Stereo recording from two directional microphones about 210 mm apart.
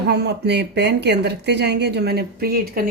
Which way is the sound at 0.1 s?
50° right (ahead or behind).